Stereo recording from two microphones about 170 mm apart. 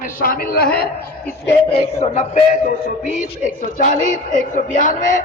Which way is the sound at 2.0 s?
40° left (ahead or behind).